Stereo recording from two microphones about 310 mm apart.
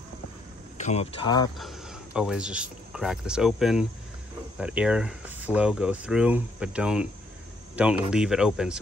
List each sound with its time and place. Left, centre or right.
0.7 s speech: left
1.6 s speech: centre